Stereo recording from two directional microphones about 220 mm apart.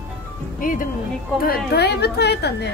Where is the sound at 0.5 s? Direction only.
35° left (ahead or behind).